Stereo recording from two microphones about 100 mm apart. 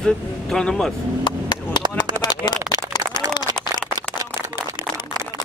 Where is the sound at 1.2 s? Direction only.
45° left (ahead or behind).